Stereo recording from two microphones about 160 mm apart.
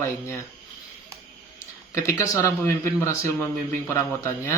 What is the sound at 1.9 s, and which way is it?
A man's voice, 15° left (ahead or behind).